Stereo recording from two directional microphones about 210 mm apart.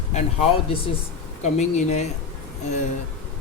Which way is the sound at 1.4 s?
35° left (ahead or behind).